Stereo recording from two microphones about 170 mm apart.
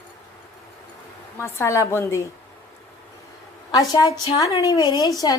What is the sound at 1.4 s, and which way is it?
Speech, 15° left (ahead or behind).